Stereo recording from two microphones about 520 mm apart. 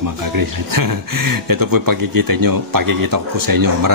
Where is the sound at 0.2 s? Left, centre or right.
Right.